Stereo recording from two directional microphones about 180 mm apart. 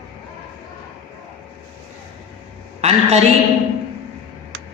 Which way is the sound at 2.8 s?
35° right (ahead or behind).